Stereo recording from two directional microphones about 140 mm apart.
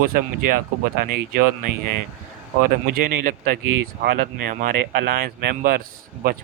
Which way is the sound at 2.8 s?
80° right.